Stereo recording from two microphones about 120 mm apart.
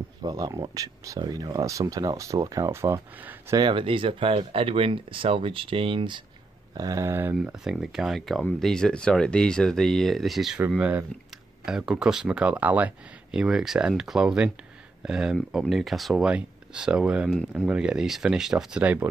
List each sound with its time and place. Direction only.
0.2 s speech: 35° right (ahead or behind); by 3.5 s 20° right (ahead or behind)
3.5 s speech: 40° right (ahead or behind)
6.7 s speech: 30° right (ahead or behind)
7.5 s speech: 5° right (ahead or behind)
10.8 s speech: 15° right (ahead or behind)
17.3 s speech: 10° left (ahead or behind)
17.6 s speech: 10° right (ahead or behind)